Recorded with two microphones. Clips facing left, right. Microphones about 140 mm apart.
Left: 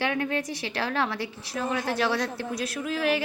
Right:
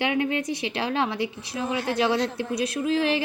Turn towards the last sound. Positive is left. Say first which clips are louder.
# right 3 dB
turn(degrees=-25)  # may be behind; listen again after turning